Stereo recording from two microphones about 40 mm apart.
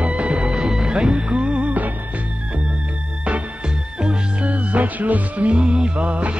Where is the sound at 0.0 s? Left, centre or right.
Right.